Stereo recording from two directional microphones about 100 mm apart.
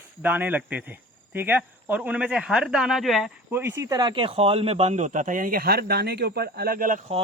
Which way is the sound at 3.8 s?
45° right (ahead or behind).